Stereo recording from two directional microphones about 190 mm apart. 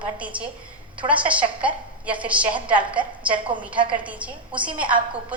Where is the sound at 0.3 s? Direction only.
5° right (ahead or behind).